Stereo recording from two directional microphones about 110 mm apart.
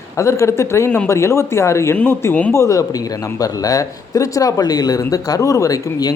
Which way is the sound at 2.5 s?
30° left (ahead or behind).